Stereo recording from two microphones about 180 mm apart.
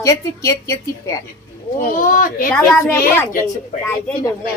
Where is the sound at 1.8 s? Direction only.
50° left (ahead or behind).